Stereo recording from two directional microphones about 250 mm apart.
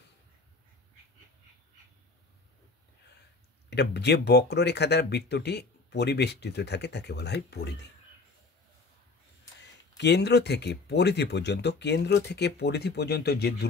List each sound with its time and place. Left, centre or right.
3.7 s speech: left
9.9 s speech: left